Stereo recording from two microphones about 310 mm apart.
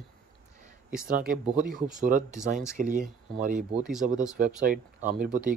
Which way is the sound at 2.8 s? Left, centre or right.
Right.